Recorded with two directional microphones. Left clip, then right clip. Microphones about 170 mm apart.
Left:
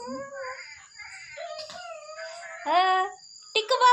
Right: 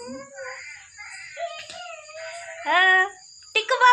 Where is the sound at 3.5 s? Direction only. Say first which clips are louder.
Right 3 dB; 5° right (ahead or behind).